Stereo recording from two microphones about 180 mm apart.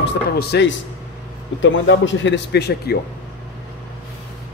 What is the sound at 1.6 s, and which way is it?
Speech, 90° left.